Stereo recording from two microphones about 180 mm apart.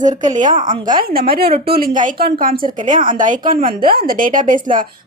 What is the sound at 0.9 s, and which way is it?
A woman's voice, 55° right (ahead or behind).